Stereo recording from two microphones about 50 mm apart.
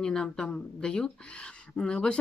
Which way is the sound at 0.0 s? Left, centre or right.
Centre.